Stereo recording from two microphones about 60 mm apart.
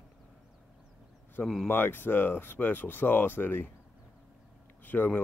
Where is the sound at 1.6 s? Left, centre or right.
Left.